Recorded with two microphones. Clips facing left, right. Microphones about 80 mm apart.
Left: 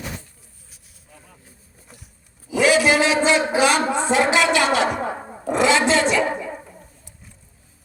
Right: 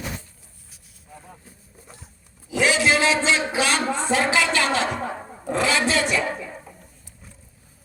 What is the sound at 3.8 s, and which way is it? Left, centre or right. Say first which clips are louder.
Roar: left 3 dB; centre.